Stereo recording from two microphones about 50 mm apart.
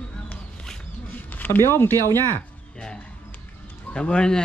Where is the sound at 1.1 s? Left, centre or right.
Left.